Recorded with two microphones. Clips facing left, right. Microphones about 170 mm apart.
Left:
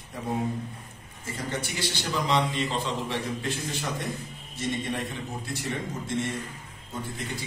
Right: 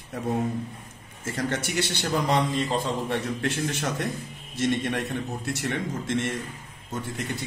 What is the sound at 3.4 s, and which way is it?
Speech, 75° right (ahead or behind).